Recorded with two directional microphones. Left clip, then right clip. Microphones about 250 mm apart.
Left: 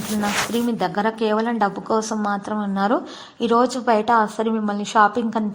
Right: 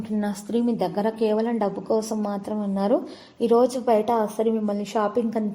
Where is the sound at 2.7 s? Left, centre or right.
Centre.